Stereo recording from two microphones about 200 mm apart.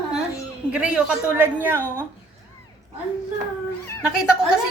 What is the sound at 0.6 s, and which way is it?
A woman's voice, 5° right (ahead or behind).